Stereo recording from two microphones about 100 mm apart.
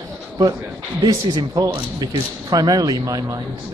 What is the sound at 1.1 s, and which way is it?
Speech, 40° right (ahead or behind).